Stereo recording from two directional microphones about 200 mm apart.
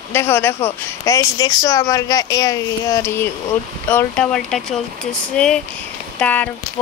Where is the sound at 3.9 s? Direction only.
5° left (ahead or behind).